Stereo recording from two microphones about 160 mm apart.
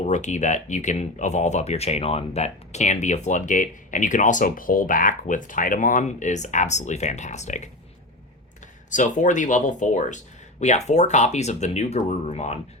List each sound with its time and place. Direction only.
0.0 s speech: 45° left (ahead or behind)